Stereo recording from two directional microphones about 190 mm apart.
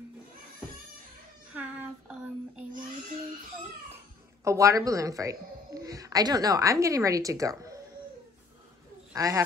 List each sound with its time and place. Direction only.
1.5 s child singing: 10° right (ahead or behind)
4.5 s speech: 15° right (ahead or behind)
9.1 s speech: 20° right (ahead or behind)